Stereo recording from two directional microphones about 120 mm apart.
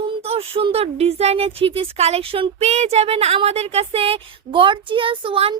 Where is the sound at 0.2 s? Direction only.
55° right (ahead or behind).